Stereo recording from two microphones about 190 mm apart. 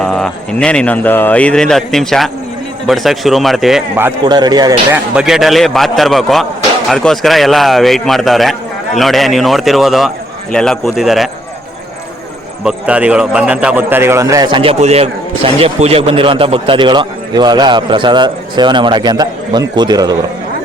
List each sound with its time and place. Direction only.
0.0 s speech: 5° left (ahead or behind)
4.3 s a man's voice: 20° right (ahead or behind)
5.1 s speech: centre (ahead or behind)
12.6 s a man's voice: 5° right (ahead or behind); by 20.1 s 20° right (ahead or behind)